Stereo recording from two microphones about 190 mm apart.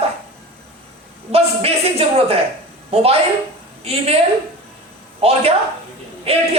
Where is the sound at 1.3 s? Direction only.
35° right (ahead or behind).